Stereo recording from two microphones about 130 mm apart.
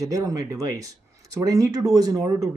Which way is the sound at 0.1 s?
30° right (ahead or behind).